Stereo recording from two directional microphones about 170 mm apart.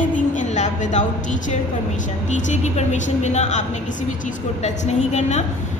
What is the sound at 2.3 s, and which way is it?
A woman's voice, 45° left (ahead or behind).